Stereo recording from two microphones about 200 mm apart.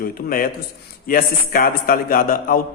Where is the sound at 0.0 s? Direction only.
45° left (ahead or behind).